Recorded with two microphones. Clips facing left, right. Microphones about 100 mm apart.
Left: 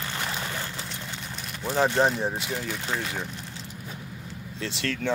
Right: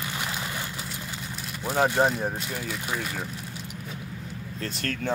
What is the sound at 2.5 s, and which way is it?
Speech, 60° left (ahead or behind).